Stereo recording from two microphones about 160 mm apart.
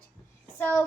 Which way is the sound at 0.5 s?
15° left (ahead or behind).